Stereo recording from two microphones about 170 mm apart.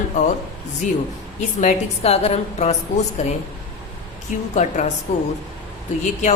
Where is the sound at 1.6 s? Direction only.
40° left (ahead or behind).